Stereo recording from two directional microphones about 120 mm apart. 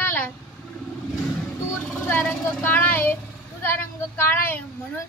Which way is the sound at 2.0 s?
15° left (ahead or behind).